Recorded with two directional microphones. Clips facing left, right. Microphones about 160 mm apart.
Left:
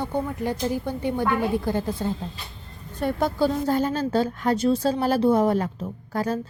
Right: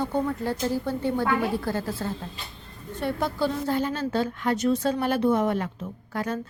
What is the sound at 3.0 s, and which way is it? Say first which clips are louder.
A woman's voice: left 4 dB; 45° left (ahead or behind).